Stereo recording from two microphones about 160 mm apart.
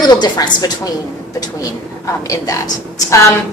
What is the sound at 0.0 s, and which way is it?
Speech, 25° left (ahead or behind).